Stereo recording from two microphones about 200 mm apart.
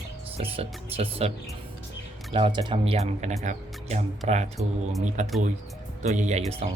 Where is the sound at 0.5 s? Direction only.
30° right (ahead or behind).